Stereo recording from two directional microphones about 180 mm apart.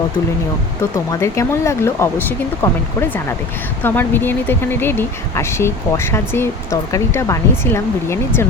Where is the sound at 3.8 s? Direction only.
10° left (ahead or behind).